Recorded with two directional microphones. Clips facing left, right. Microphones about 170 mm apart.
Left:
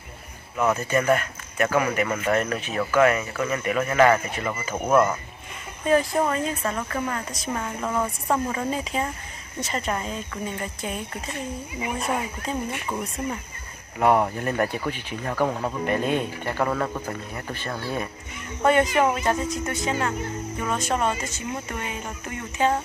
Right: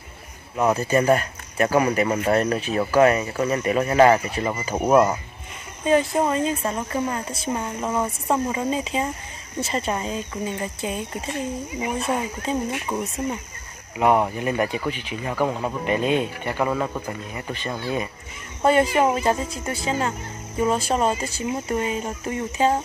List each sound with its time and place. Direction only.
0.6 s speech: 30° right (ahead or behind)
4.9 s speech: 15° right (ahead or behind)
18.6 s speech: 30° right (ahead or behind)